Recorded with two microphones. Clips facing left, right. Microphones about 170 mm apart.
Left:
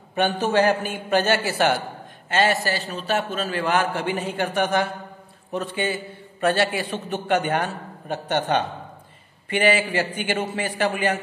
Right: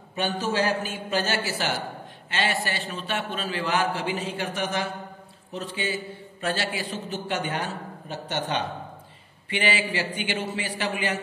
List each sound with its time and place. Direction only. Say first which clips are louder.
0.1 s a man's voice: left 6 dB; 60° left (ahead or behind)
2.2 s a man's voice: left 6 dB; 45° left (ahead or behind)